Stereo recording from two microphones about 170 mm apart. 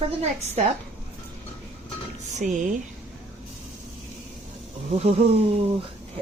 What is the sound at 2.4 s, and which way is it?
Speech, 50° right (ahead or behind).